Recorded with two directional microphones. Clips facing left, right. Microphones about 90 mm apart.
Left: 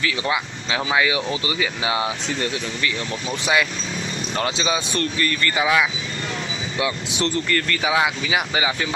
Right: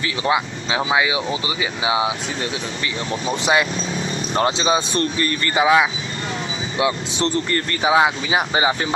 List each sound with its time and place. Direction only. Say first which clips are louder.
0.0 s speech: right 3 dB; 25° right (ahead or behind)